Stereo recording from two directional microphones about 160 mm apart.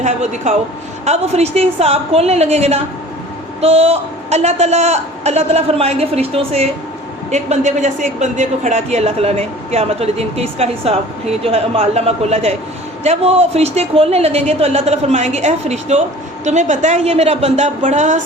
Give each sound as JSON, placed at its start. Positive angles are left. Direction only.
{"t": 0.0, "sound": "a man's voice", "side_deg": -45}